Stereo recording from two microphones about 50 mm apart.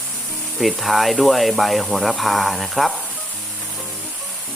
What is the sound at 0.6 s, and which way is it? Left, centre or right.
Speech, centre.